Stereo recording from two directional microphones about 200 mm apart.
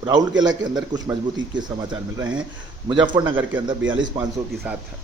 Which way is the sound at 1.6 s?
20° right (ahead or behind).